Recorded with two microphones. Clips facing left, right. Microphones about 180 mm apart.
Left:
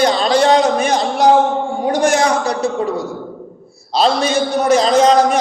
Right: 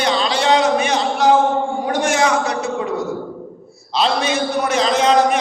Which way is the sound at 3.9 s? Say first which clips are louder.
Left 3 dB; 40° left (ahead or behind).